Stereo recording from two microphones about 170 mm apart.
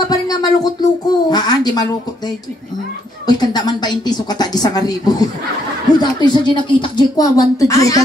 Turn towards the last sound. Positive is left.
turn(degrees=20)  # may be behind; listen again after turning